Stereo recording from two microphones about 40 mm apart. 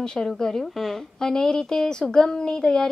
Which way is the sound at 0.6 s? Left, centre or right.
Centre.